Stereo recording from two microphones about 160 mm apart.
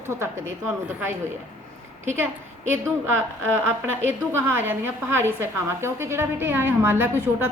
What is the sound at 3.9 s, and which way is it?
A woman's voice, 15° right (ahead or behind).